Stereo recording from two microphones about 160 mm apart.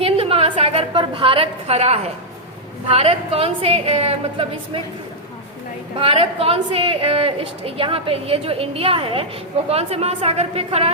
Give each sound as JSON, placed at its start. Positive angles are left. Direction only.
{"t": 0.0, "sound": "a sound", "side_deg": -35}
{"t": 2.9, "sound": "a woman's voice", "side_deg": -40}
{"t": 6.0, "sound": "a woman's voice", "side_deg": -35}